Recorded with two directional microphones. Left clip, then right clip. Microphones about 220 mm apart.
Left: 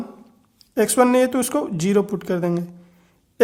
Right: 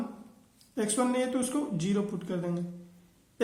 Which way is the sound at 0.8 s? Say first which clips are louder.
Left 13 dB; 40° left (ahead or behind).